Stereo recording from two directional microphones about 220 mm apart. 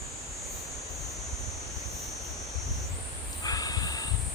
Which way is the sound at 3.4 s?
15° left (ahead or behind).